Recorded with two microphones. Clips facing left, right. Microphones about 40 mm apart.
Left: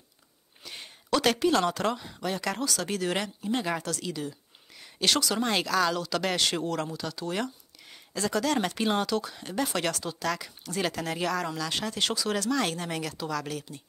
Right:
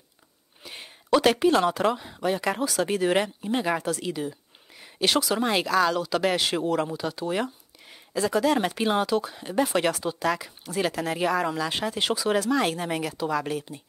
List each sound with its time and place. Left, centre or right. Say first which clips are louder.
0.7 s speech: right 5 dB; centre